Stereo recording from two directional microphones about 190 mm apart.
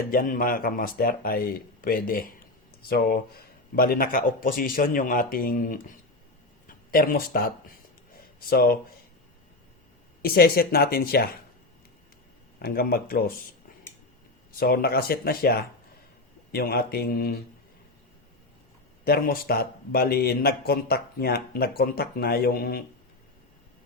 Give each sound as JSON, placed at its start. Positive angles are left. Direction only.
{"t": 0.1, "sound": "speech", "side_deg": 45}
{"t": 3.8, "sound": "speech", "side_deg": 50}
{"t": 8.1, "sound": "a sound", "side_deg": 55}
{"t": 10.2, "sound": "speech", "side_deg": 50}
{"t": 12.5, "sound": "speech", "side_deg": 50}
{"t": 14.6, "sound": "speech", "side_deg": 55}
{"t": 19.0, "sound": "speech", "side_deg": 55}